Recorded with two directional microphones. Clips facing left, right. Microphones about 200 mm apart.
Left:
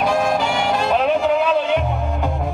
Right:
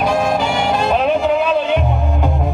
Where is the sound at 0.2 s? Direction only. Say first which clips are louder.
Right 2 dB; 20° right (ahead or behind).